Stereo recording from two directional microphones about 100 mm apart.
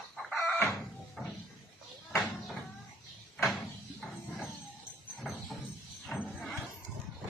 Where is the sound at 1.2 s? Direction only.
Centre (ahead or behind).